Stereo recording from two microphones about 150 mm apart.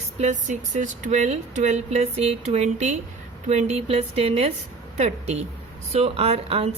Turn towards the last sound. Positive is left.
turn(degrees=-45)  # may be behind; listen again after turning